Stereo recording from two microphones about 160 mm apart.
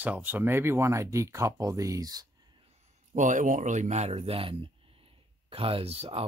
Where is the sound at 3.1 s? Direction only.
50° right (ahead or behind).